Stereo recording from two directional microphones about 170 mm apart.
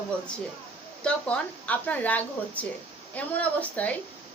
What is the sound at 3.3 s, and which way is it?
Speech, 10° left (ahead or behind).